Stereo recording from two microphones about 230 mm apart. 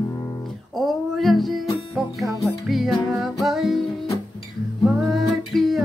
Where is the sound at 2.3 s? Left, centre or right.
Centre.